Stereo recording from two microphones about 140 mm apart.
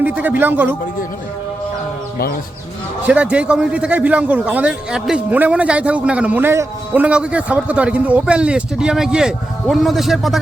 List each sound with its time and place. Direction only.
0.0 s a man's voice: 10° right (ahead or behind)
3.1 s a man's voice: 10° right (ahead or behind)